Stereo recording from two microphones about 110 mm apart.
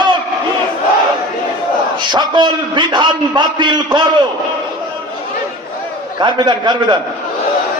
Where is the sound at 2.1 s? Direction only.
45° right (ahead or behind).